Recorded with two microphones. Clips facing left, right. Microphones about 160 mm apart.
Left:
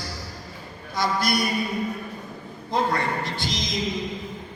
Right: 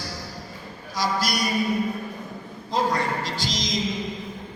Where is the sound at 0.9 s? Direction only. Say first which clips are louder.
Left 1 dB; 55° left (ahead or behind).